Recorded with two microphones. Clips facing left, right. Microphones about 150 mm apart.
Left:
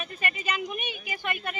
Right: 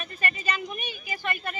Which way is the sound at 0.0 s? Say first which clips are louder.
Right 1 dB; 5° left (ahead or behind).